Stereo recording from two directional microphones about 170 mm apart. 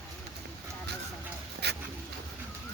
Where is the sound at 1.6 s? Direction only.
80° right.